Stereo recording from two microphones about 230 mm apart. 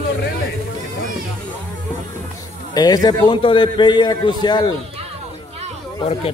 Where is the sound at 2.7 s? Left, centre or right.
Centre.